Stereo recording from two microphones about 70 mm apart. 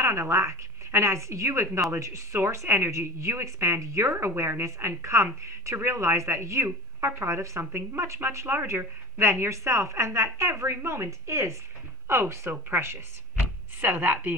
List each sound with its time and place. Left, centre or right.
0.0 s a woman's voice: right